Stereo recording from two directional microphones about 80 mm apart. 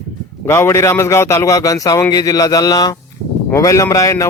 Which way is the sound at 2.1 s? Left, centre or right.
Left.